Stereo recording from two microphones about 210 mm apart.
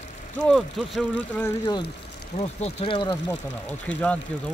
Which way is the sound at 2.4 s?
30° left (ahead or behind).